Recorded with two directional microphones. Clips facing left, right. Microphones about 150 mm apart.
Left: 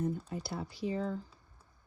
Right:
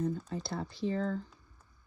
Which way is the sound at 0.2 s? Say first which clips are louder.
Right 2 dB; 10° left (ahead or behind).